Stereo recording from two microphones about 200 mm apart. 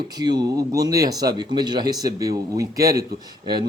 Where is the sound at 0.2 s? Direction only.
20° right (ahead or behind).